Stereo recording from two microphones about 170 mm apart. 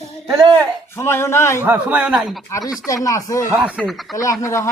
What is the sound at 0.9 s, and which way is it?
Speech, 15° left (ahead or behind).